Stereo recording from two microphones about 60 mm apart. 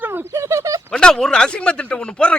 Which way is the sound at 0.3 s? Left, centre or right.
Right.